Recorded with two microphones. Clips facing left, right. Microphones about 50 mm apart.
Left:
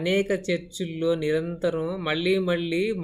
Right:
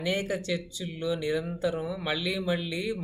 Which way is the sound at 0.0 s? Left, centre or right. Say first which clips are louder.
Left 6 dB; left.